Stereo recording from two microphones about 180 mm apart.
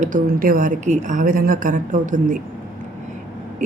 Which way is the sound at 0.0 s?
50° right (ahead or behind).